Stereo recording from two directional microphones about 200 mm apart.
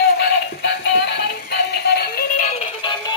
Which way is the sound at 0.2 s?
60° left (ahead or behind).